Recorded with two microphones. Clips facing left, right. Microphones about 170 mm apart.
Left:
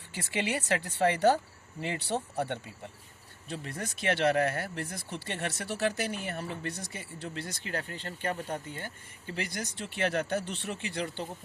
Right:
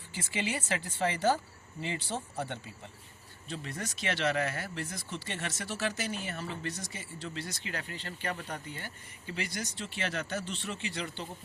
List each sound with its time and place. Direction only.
0.1 s speech: 65° left (ahead or behind)